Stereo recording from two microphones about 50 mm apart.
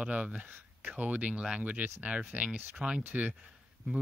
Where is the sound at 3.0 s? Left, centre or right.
Right.